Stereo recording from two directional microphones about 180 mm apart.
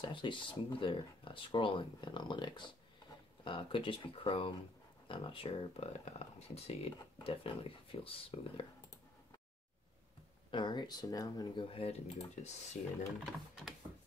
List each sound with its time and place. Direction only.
0.0 s speech: 25° left (ahead or behind)
10.5 s speech: 25° left (ahead or behind)
13.2 s speech: centre (ahead or behind)